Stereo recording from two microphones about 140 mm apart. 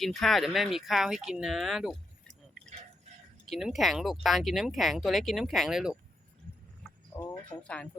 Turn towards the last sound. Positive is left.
turn(degrees=10)  # may be behind; listen again after turning